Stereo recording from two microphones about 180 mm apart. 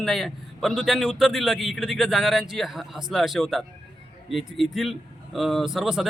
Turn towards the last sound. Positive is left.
turn(degrees=0)  # may be behind; listen again after turning